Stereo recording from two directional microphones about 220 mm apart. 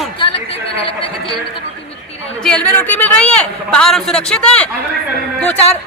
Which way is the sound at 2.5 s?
5° left (ahead or behind).